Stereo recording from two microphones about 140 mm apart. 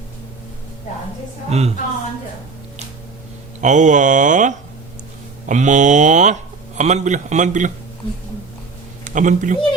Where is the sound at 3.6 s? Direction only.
60° right (ahead or behind).